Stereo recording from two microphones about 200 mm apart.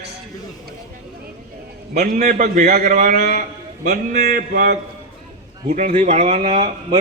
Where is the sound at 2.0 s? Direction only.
45° right (ahead or behind).